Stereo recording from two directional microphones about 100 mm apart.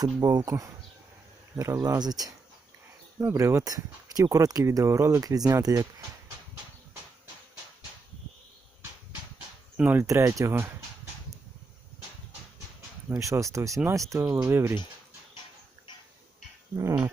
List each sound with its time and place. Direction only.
0.0 s speech: 40° right (ahead or behind)
3.2 s speech: 30° right (ahead or behind)
9.7 s speech: 15° right (ahead or behind)
10.0 s speech: 25° right (ahead or behind)
13.1 s speech: 30° right (ahead or behind)